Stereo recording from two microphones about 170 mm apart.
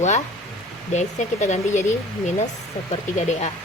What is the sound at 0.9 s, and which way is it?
Speech, 45° left (ahead or behind).